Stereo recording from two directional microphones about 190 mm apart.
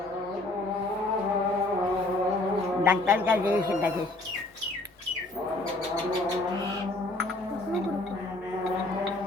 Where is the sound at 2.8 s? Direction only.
5° right (ahead or behind).